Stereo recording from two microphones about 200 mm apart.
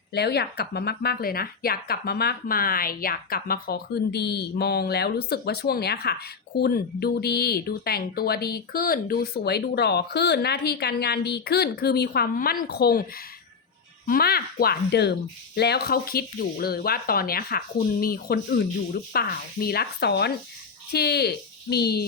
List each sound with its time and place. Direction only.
0.1 s speech: 55° left (ahead or behind)
14.1 s speech: 50° left (ahead or behind)